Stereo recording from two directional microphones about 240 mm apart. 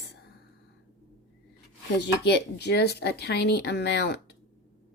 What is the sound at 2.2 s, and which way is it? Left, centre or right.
Speech, left.